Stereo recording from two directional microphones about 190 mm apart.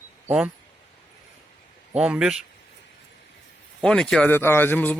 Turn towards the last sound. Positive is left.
turn(degrees=10)  # may be behind; listen again after turning